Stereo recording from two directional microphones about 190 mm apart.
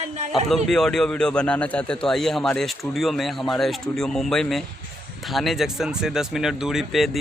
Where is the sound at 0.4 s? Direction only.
Centre (ahead or behind).